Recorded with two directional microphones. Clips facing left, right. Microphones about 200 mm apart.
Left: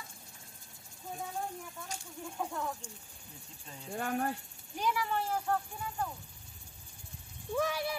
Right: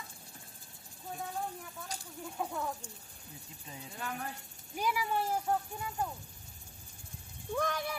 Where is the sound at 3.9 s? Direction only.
45° left (ahead or behind).